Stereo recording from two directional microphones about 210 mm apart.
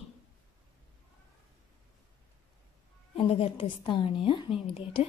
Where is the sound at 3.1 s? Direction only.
25° left (ahead or behind).